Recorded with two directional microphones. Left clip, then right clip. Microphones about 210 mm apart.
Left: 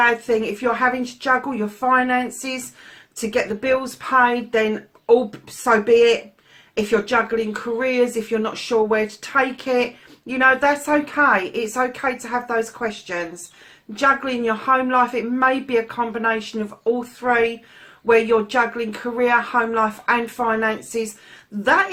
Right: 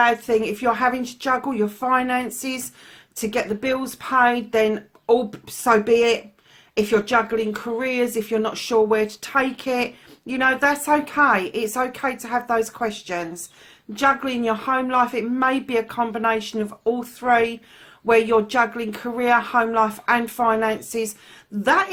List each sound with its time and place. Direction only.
0.0 s speech: 45° right (ahead or behind)